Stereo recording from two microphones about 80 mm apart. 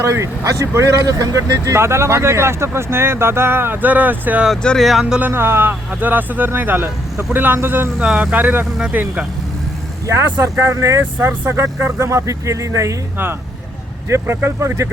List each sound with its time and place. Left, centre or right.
0.0 s speech: right
4.8 s speech: centre
5.2 s speech: right
7.9 s speech: centre
10.4 s speech: right
14.1 s speech: right